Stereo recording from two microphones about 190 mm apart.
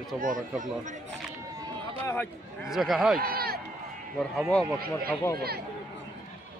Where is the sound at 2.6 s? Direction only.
Centre (ahead or behind).